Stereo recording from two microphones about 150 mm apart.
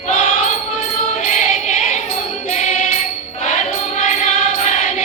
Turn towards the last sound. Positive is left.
turn(degrees=50)  # may be behind; listen again after turning